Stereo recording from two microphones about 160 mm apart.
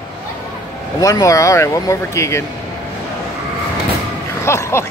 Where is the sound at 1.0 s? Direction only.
20° left (ahead or behind).